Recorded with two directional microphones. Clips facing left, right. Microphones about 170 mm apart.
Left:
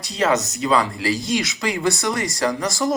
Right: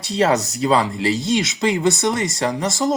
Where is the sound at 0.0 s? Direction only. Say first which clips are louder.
Right 2 dB; 30° right (ahead or behind).